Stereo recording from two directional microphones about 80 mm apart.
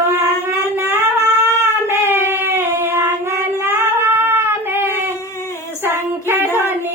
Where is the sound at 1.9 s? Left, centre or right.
Right.